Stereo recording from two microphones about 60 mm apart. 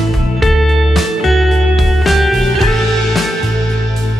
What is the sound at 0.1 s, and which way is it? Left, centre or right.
Music, centre.